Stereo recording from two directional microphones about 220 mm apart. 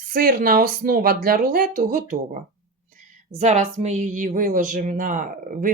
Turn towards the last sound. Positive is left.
turn(degrees=-40)  # may be behind; listen again after turning